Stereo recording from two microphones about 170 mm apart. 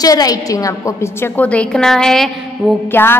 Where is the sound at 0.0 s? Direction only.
20° left (ahead or behind); by 2.8 s centre (ahead or behind).